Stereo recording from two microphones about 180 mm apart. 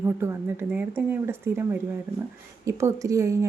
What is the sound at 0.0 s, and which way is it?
A woman's voice, 15° right (ahead or behind).